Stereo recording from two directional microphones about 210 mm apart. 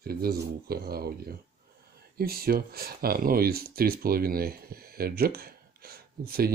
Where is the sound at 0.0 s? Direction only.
45° right (ahead or behind).